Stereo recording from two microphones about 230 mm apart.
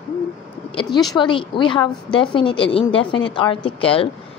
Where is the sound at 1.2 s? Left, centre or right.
Left.